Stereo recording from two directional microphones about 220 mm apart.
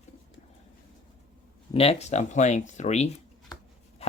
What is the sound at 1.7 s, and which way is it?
Speech, 30° left (ahead or behind).